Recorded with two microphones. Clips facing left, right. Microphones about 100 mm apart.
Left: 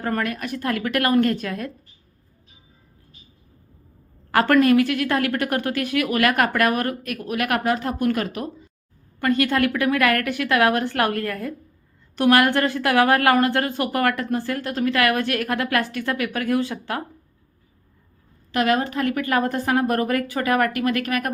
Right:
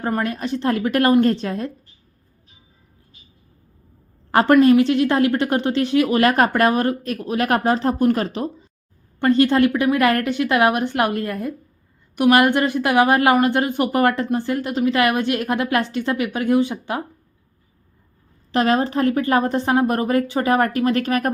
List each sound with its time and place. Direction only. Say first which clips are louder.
0.0 s a woman's voice: right 2 dB; 25° right (ahead or behind)
4.3 s a woman's voice: right 3 dB; 25° right (ahead or behind)
18.5 s a woman's voice: right 3 dB; 30° right (ahead or behind)